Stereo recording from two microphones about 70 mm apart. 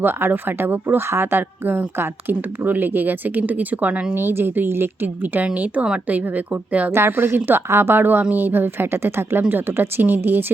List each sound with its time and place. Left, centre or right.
0.0 s a woman's voice: right
6.9 s a woman's voice: right